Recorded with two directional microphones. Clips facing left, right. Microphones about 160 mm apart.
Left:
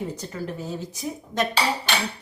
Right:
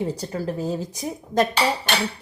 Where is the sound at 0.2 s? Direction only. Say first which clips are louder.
Right 5 dB; 35° right (ahead or behind).